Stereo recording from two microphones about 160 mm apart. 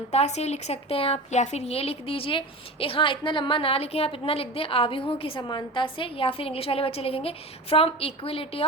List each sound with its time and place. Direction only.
0.1 s a woman's voice: 45° left (ahead or behind)